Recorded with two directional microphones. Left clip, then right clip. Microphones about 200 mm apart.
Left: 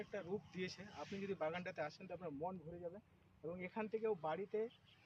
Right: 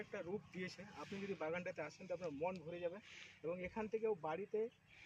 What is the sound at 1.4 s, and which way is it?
Speech, 15° left (ahead or behind).